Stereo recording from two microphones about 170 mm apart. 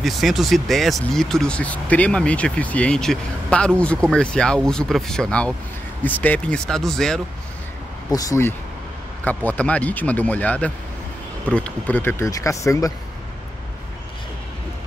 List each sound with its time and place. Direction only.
0.0 s speech: centre (ahead or behind)
8.1 s speech: 20° left (ahead or behind)